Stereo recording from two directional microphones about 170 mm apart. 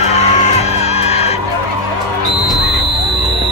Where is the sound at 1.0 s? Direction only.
40° left (ahead or behind).